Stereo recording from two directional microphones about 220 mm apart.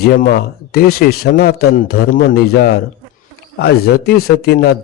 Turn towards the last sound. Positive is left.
turn(degrees=45)  # may be behind; listen again after turning